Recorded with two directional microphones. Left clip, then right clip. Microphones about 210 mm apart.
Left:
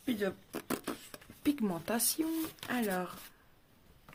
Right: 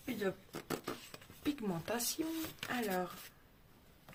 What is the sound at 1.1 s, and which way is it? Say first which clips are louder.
Speech: left 8 dB; 40° left (ahead or behind).